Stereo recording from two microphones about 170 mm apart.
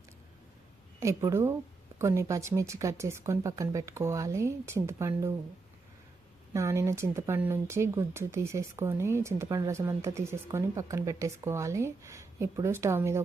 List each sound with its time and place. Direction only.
0.9 s speech: 15° right (ahead or behind)
6.5 s speech: 15° right (ahead or behind)